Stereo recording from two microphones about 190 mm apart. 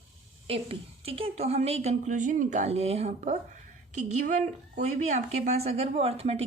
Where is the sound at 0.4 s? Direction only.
30° right (ahead or behind).